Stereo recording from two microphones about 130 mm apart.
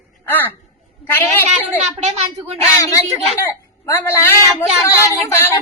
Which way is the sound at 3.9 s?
15° left (ahead or behind).